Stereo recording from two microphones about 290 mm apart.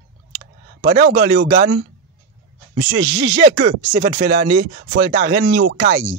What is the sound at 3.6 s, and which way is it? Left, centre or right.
Speech, right.